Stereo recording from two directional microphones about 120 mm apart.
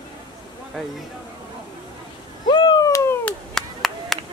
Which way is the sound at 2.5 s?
35° left (ahead or behind).